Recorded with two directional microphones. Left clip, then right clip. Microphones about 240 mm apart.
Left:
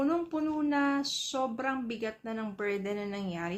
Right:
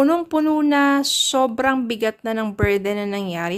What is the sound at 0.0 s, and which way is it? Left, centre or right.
Speech, right.